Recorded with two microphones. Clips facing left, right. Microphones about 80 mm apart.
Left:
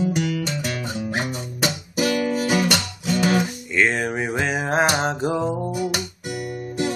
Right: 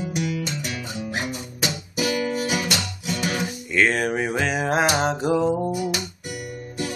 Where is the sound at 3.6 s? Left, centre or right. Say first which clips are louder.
Right 4 dB; centre.